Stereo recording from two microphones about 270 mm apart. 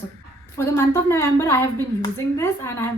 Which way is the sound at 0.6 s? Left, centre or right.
Centre.